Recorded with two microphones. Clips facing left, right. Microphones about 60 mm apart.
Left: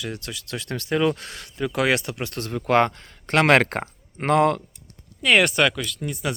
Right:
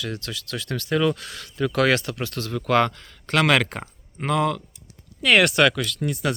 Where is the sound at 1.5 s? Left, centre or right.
Centre; by 4.6 s left.